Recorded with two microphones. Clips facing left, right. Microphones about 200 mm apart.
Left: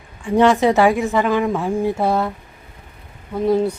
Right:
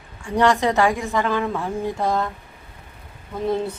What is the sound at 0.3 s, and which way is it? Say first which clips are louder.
Speech: left 5 dB; 10° left (ahead or behind).